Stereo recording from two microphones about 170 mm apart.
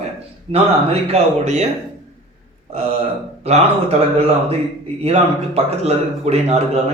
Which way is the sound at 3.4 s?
35° right (ahead or behind).